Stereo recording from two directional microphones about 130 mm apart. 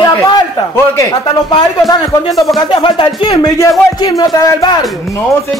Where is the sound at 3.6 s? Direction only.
25° left (ahead or behind).